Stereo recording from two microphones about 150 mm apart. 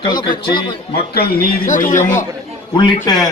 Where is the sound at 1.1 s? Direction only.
90° left; by 2.2 s 60° left (ahead or behind).